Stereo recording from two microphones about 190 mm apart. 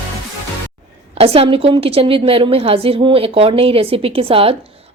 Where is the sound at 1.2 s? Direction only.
30° right (ahead or behind).